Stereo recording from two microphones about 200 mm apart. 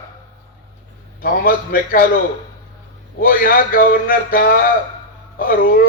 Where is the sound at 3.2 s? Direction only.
45° left (ahead or behind).